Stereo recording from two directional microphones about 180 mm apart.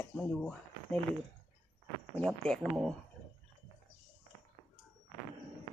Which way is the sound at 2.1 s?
5° left (ahead or behind).